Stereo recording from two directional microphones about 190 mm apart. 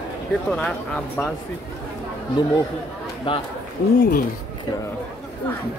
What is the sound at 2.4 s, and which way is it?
Speech, 20° left (ahead or behind).